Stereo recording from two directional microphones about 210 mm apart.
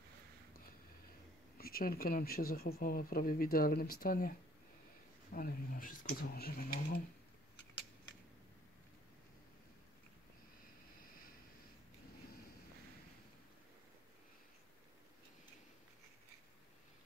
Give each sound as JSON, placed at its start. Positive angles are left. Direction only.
{"t": 1.6, "sound": "speech", "side_deg": 45}
{"t": 5.3, "sound": "speech", "side_deg": 40}